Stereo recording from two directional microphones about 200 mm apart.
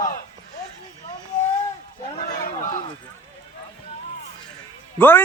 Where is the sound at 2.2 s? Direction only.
45° left (ahead or behind).